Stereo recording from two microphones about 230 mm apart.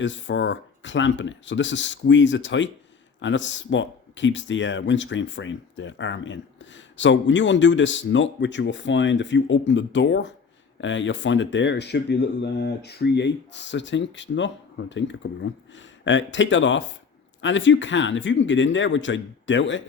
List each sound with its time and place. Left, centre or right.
0.0 s speech: left